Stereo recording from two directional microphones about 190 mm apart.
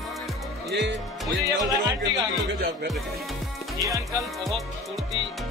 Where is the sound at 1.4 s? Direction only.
20° right (ahead or behind).